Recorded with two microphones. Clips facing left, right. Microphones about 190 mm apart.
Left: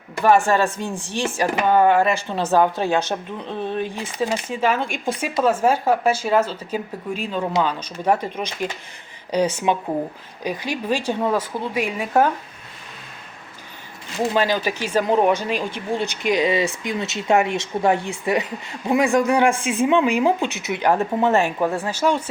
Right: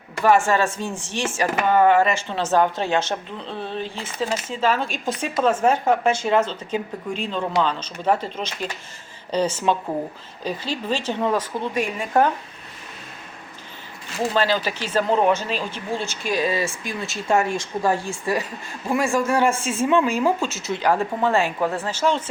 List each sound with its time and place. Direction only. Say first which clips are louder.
0.3 s speech: left 1 dB; 15° left (ahead or behind)
14.2 s speech: left 1 dB; 15° left (ahead or behind)